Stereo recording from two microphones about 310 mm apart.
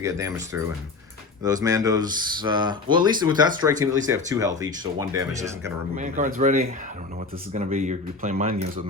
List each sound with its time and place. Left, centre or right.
0.0 s speech: centre
1.6 s speech: centre
6.0 s speech: right